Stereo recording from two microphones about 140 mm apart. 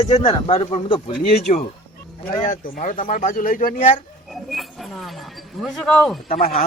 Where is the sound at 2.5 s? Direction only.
90° left.